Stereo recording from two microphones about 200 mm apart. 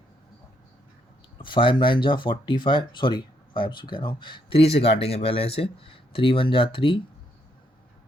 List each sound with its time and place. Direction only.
1.4 s speech: 25° left (ahead or behind)